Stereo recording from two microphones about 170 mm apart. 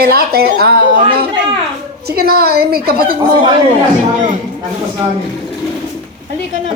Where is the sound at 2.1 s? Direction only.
65° right (ahead or behind).